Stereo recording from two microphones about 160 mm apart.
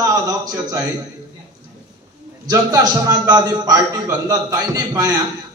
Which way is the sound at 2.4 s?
20° right (ahead or behind).